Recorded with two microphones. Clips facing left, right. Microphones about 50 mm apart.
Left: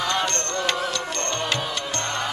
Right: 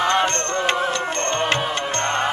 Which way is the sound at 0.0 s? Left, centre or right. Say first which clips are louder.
Right 5 dB; right.